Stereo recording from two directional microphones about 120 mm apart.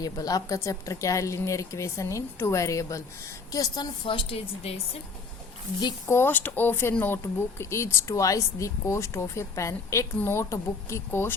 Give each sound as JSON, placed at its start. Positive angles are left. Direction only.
{"t": 0.0, "sound": "a woman's voice", "side_deg": 30}
{"t": 6.1, "sound": "speech", "side_deg": 20}